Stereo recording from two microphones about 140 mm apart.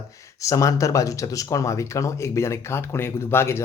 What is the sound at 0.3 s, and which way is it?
Speech, 25° left (ahead or behind).